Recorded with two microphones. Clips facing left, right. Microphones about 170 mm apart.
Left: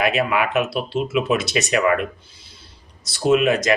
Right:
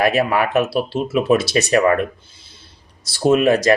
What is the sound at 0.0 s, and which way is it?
Speech, 40° right (ahead or behind).